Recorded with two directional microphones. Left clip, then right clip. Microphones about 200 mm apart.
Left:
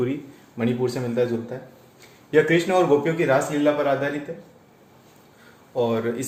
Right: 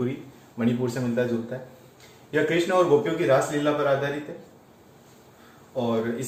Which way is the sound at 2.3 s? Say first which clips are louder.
Left 3 dB; 45° left (ahead or behind).